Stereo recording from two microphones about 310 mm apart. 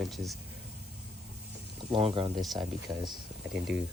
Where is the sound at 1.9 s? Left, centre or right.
Centre.